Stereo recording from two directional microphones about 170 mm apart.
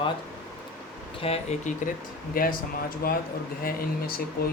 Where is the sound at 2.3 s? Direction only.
60° left (ahead or behind).